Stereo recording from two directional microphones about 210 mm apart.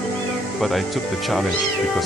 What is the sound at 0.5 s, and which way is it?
Speech, centre (ahead or behind).